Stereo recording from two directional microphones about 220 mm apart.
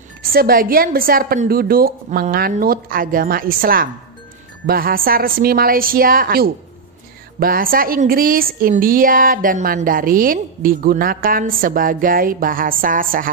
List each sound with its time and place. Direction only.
0.2 s a woman's voice: 40° right (ahead or behind)